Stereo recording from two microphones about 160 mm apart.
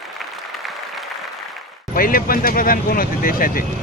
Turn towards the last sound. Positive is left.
turn(degrees=65)  # may be behind; listen again after turning